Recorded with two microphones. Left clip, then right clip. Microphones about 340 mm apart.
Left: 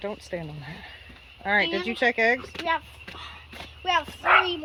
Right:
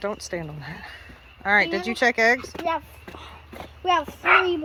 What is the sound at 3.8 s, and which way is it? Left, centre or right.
Speech, right.